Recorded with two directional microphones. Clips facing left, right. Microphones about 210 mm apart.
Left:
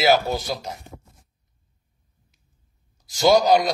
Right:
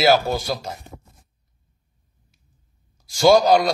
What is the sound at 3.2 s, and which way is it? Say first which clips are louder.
Speech: right 2 dB; 15° left (ahead or behind).